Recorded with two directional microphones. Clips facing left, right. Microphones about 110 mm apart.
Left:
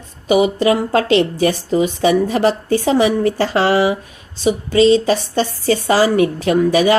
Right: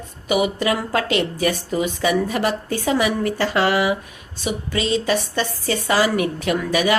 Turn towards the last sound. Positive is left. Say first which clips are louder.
# left 6 dB
turn(degrees=30)  # may be behind; listen again after turning